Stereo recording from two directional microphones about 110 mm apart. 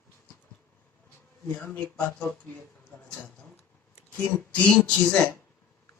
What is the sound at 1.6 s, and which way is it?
Speech, 10° left (ahead or behind).